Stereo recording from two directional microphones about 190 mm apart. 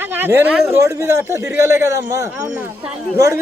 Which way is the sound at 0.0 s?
10° right (ahead or behind).